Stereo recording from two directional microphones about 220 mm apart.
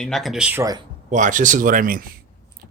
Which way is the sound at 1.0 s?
35° right (ahead or behind).